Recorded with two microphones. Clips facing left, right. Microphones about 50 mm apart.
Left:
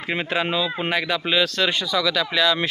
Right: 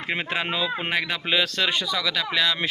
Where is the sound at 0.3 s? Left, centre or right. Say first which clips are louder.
Left 5 dB; centre.